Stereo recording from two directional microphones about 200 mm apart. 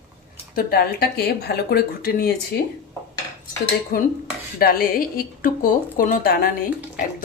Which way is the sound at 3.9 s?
45° left (ahead or behind).